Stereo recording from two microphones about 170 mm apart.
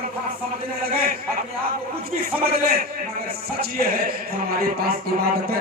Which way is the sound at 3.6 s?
60° right (ahead or behind).